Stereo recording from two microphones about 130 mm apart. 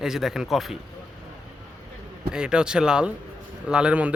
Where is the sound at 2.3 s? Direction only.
5° right (ahead or behind).